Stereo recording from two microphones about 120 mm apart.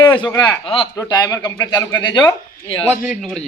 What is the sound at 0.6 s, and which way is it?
Speech, 45° left (ahead or behind).